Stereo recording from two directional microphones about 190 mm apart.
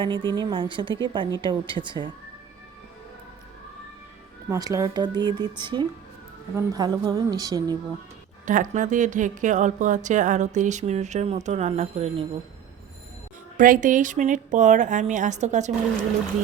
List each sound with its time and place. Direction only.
0.0 s a woman's voice: 25° right (ahead or behind)
4.4 s a woman's voice: 15° right (ahead or behind)
8.4 s speech: 40° right (ahead or behind)
13.6 s speech: 45° right (ahead or behind)